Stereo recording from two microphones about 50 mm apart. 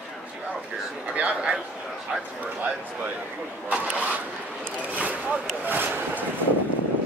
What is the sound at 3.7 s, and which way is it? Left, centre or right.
Zipper, right.